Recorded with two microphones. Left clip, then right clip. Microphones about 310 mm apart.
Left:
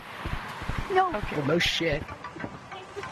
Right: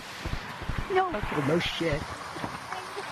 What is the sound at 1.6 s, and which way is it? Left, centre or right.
Speech, left.